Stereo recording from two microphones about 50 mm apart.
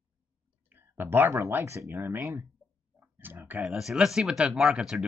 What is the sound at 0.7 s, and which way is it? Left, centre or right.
Speech, right.